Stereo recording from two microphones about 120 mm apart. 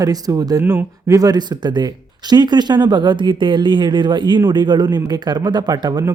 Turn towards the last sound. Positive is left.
turn(degrees=-35)  # may be behind; listen again after turning